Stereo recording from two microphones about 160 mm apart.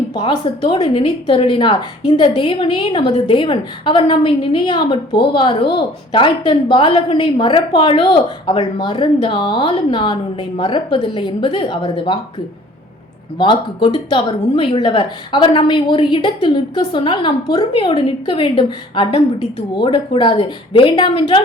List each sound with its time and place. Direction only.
0.1 s a woman's voice: 30° left (ahead or behind)
13.4 s a woman's voice: 30° left (ahead or behind)